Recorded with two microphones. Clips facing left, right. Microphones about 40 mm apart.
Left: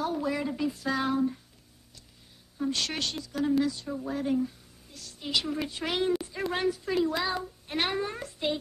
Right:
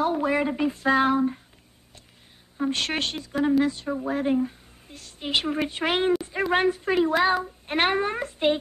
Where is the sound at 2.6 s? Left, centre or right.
Right.